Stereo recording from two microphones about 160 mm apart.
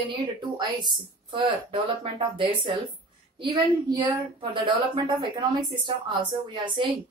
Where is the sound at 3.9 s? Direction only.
30° right (ahead or behind).